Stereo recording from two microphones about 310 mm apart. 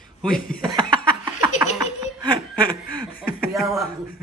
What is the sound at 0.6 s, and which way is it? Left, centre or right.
Chuckle, centre.